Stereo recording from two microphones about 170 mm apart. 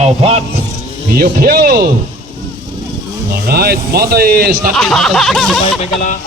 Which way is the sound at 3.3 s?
65° right (ahead or behind).